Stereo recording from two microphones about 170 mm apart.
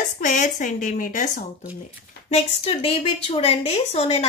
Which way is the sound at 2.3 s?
35° left (ahead or behind).